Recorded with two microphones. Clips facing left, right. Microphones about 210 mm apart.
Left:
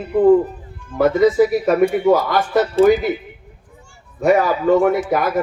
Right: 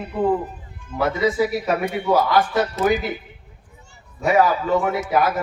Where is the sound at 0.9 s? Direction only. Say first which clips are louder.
Left 7 dB; 50° left (ahead or behind).